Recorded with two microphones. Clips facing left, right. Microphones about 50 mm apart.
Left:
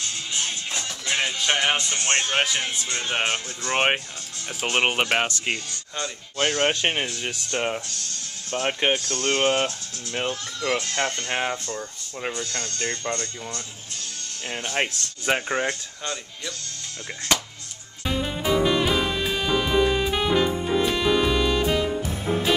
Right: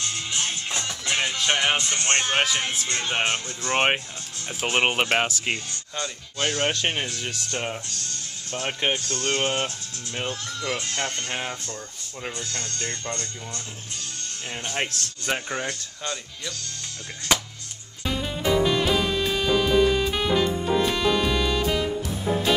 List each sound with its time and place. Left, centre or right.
0.5 s music: centre
1.1 s music: centre
1.9 s speech: centre
6.3 s speech: left
9.1 s speech: centre
14.5 s speech: centre
17.3 s speech: centre
18.0 s music: centre